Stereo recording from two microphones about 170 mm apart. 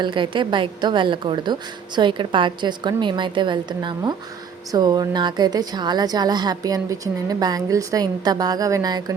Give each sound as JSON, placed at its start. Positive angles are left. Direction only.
{"t": 0.0, "sound": "a woman's voice", "side_deg": -30}